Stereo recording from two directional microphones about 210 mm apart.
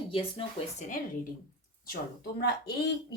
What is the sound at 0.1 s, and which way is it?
Speech, 25° left (ahead or behind).